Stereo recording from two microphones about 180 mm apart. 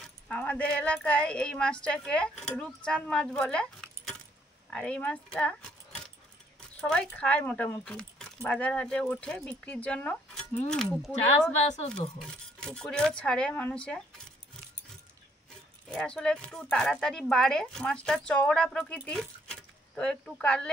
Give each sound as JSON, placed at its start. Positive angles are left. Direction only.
{"t": 0.0, "sound": "speech", "side_deg": 10}
{"t": 11.5, "sound": "speech", "side_deg": 40}
{"t": 12.2, "sound": "speech", "side_deg": 5}
{"t": 15.9, "sound": "speech", "side_deg": 5}